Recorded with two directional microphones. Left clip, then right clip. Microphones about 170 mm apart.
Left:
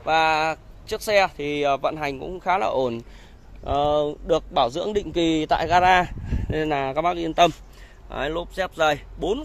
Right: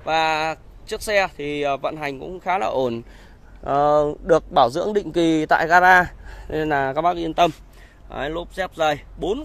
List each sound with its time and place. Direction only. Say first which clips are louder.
0.0 s speech: even; 15° right (ahead or behind)
2.7 s speech: right 1 dB; 25° right (ahead or behind); by 9.4 s 10° right (ahead or behind)